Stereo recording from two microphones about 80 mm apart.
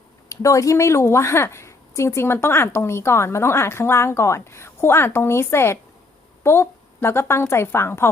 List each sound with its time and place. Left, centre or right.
0.3 s a woman's voice: left